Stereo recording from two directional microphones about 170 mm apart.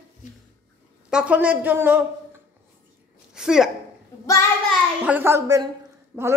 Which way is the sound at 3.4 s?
5° right (ahead or behind).